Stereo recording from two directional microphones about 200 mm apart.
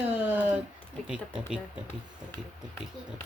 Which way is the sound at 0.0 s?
10° right (ahead or behind).